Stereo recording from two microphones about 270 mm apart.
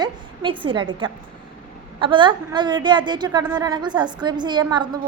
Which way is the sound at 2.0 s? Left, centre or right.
Centre.